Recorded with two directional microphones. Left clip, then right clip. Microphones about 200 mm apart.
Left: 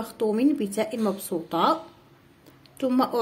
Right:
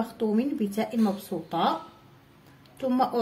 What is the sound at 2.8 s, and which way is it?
Speech, 35° left (ahead or behind).